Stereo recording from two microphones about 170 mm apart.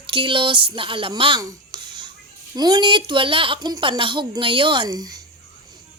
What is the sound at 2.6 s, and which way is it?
A woman's voice, 25° right (ahead or behind).